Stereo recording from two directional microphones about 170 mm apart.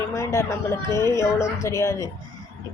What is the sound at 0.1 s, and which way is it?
A woman's voice, 15° left (ahead or behind).